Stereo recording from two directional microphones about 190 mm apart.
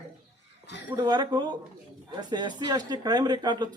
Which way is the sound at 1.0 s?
20° right (ahead or behind).